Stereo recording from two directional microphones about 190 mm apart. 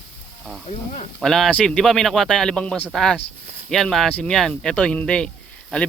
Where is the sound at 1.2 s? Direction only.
Centre (ahead or behind).